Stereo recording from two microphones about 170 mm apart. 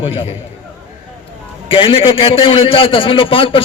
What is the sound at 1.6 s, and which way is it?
A man's voice, 30° left (ahead or behind).